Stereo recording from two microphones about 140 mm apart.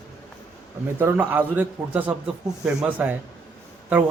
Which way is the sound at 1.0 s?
15° right (ahead or behind).